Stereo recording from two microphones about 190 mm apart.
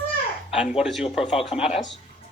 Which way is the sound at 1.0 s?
30° left (ahead or behind).